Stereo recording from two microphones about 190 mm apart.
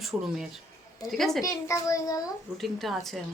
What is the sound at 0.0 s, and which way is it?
Speech, centre (ahead or behind).